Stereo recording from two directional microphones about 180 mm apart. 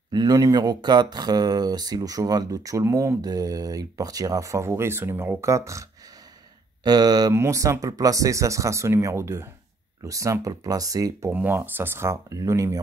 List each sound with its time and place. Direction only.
0.1 s speech: 20° right (ahead or behind)